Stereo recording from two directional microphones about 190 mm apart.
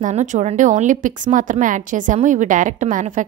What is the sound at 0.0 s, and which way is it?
A woman's voice, 40° right (ahead or behind).